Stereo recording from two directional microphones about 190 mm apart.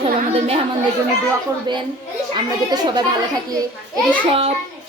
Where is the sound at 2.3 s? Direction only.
20° right (ahead or behind).